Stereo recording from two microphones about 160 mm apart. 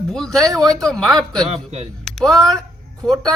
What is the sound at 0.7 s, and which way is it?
Speech, 5° left (ahead or behind).